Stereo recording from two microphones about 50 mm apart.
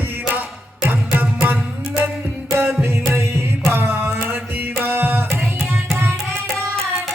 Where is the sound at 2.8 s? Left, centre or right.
Right.